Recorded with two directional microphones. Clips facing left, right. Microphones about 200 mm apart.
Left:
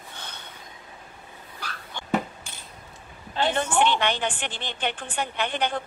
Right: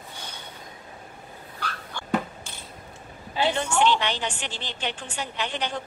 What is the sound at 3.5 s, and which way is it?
A woman's voice, 55° left (ahead or behind).